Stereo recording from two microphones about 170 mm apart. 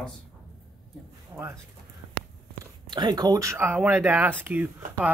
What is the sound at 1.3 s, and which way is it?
Speech, 15° right (ahead or behind).